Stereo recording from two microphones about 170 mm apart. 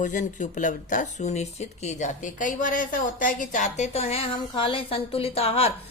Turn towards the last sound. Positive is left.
turn(degrees=35)  # may be behind; listen again after turning